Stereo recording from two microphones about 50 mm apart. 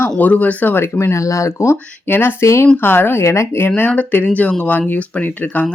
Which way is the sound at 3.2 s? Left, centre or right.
Left.